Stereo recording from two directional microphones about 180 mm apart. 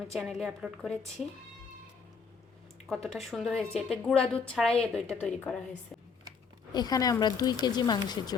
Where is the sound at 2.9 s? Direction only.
Centre (ahead or behind).